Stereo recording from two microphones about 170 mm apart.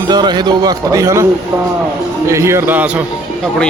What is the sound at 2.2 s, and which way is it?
Speech, 15° right (ahead or behind).